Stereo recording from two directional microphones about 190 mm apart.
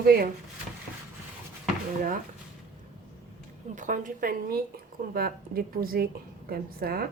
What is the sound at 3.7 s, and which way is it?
Speech, 40° right (ahead or behind).